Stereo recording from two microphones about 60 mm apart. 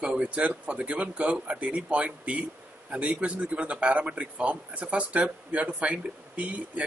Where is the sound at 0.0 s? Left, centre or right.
Right.